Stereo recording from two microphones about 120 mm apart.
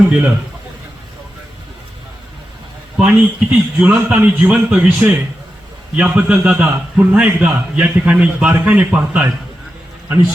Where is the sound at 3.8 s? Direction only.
10° right (ahead or behind).